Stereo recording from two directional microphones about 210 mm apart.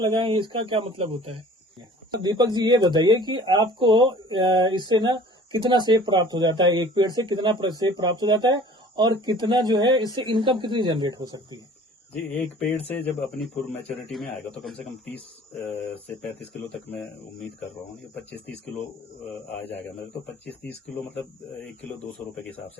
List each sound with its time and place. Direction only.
0.0 s speech: 20° right (ahead or behind)
12.9 s speech: 10° left (ahead or behind)